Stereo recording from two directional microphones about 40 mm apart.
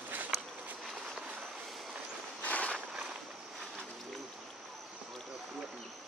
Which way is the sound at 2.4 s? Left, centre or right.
Left.